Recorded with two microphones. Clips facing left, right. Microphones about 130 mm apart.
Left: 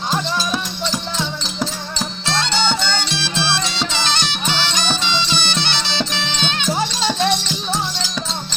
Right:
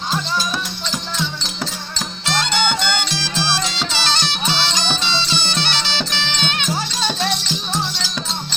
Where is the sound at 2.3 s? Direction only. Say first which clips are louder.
Right 1 dB; 25° left (ahead or behind).